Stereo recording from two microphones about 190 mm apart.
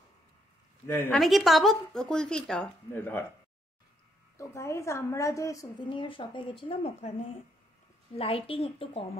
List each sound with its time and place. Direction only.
0.8 s speech: 10° left (ahead or behind)
4.4 s a woman's voice: 15° left (ahead or behind)